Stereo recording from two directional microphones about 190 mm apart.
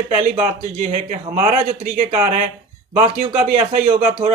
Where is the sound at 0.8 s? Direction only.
40° right (ahead or behind).